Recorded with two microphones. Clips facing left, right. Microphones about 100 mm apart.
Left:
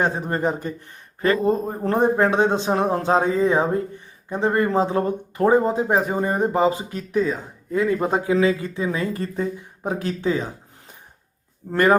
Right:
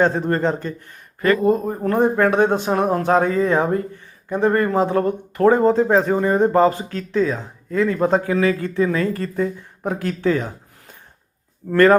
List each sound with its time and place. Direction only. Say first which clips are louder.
0.0 s speech: right 4 dB; 15° left (ahead or behind)
1.2 s speech: right 3 dB; 25° left (ahead or behind)